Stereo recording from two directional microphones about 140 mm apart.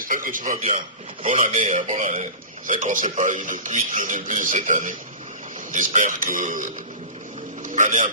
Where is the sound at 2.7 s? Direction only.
75° right (ahead or behind).